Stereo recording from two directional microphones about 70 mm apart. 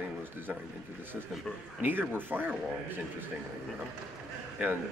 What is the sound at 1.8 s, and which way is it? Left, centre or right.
Speech, right.